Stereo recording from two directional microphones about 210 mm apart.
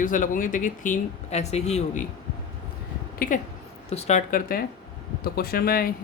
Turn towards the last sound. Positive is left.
turn(degrees=45)  # may be behind; listen again after turning